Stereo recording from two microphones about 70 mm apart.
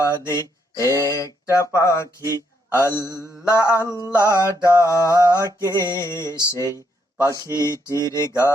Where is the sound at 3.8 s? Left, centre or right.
Right.